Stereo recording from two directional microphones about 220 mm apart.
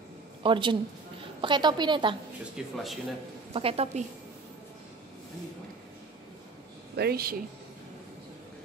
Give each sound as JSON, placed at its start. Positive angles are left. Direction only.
{"t": 0.4, "sound": "a woman's voice", "side_deg": -20}
{"t": 2.5, "sound": "speech", "side_deg": 0}
{"t": 3.5, "sound": "a woman's voice", "side_deg": -25}
{"t": 7.0, "sound": "speech", "side_deg": -45}